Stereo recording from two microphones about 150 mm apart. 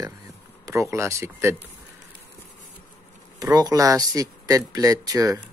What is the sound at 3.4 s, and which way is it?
Speech, 25° right (ahead or behind).